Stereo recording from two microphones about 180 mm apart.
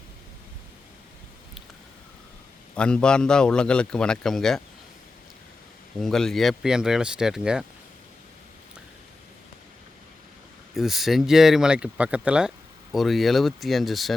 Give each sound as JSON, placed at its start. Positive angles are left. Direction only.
{"t": 2.7, "sound": "a man's voice", "side_deg": 5}
{"t": 6.0, "sound": "a man's voice", "side_deg": 5}
{"t": 10.8, "sound": "a man's voice", "side_deg": 0}